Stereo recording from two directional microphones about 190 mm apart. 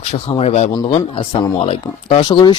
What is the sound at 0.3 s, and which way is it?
A man's voice, 35° left (ahead or behind).